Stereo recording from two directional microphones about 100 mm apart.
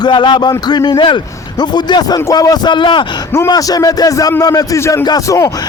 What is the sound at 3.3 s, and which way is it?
A man's voice, 40° left (ahead or behind).